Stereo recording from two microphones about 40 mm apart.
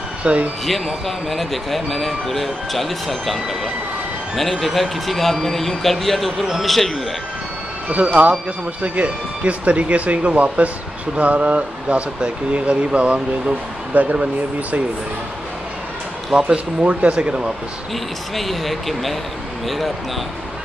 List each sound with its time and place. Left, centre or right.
0.2 s speech: right
0.7 s speech: centre
7.9 s speech: right
13.9 s speech: right
16.5 s speech: right
18.3 s speech: centre